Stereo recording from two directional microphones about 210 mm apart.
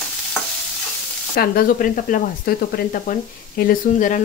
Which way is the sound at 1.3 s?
40° left (ahead or behind).